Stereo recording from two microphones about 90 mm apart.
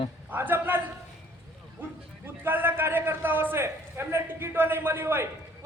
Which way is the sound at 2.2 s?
20° right (ahead or behind).